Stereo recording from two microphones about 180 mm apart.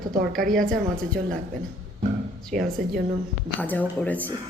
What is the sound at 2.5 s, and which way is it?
Speech, 55° right (ahead or behind).